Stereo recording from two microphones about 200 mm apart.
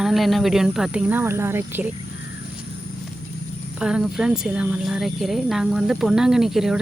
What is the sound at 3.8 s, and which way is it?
Speech, 5° right (ahead or behind).